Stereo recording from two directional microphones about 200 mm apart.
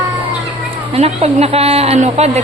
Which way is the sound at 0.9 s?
30° right (ahead or behind).